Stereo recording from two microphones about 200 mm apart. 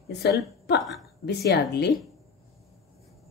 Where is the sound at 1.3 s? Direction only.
55° left (ahead or behind).